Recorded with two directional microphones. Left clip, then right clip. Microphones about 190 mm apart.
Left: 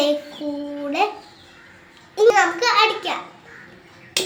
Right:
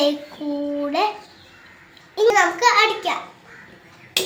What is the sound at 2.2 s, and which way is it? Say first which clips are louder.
Speech: left 1 dB; 20° right (ahead or behind).